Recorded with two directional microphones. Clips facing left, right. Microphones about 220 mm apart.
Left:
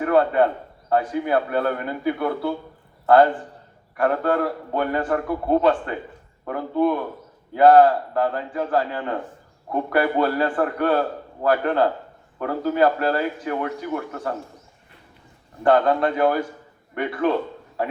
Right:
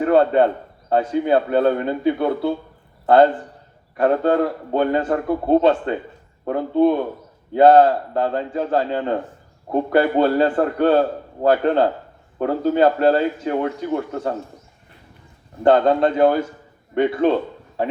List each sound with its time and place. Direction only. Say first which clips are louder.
0.0 s a man's voice: right 3 dB; 25° right (ahead or behind)
3.9 s a man's voice: right 4 dB; 25° right (ahead or behind)
15.6 s a man's voice: right 3 dB; 25° right (ahead or behind)